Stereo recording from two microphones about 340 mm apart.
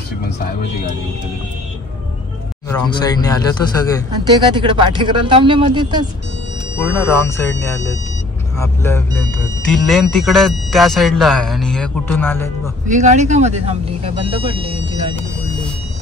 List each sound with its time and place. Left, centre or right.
2.7 s speech: centre
4.3 s speech: centre
6.8 s speech: centre
12.8 s speech: right